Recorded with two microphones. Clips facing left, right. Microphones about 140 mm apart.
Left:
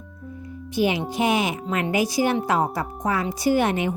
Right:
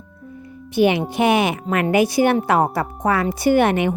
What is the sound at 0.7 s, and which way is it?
A woman's voice, 65° right (ahead or behind).